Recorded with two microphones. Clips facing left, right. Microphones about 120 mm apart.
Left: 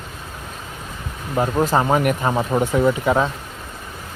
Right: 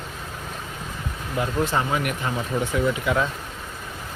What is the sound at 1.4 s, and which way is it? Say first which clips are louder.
Speech: left 6 dB; 40° left (ahead or behind).